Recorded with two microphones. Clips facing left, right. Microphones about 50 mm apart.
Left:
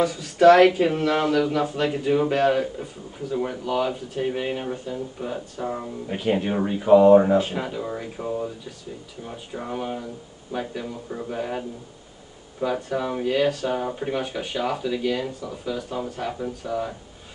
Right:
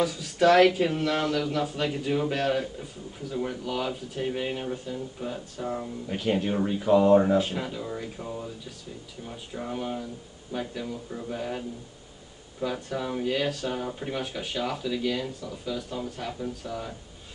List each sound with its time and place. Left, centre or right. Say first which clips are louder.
0.0 s speech: left 6 dB; centre
3.3 s speech: left 4 dB; left
3.6 s speech: left 6 dB; centre
12.7 s speech: left 5 dB; centre